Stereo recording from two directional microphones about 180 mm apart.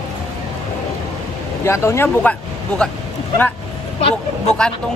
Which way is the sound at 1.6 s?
15° left (ahead or behind).